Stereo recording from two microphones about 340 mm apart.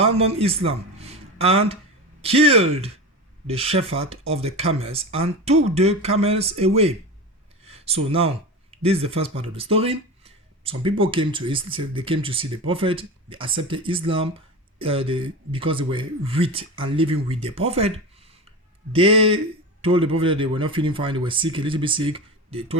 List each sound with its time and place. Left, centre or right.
0.0 s a man's voice: centre